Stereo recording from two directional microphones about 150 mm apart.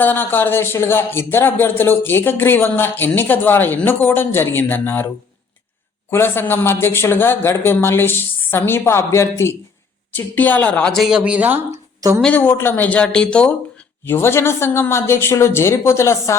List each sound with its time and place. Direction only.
0.0 s a woman's voice: 15° left (ahead or behind); by 11.6 s 10° right (ahead or behind)
11.9 s speech: 20° right (ahead or behind)
12.2 s speech: 10° left (ahead or behind)